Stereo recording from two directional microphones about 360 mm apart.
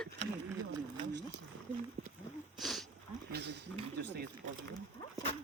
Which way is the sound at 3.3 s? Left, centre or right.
Right.